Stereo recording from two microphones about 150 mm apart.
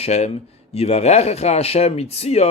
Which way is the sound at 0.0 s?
45° left (ahead or behind).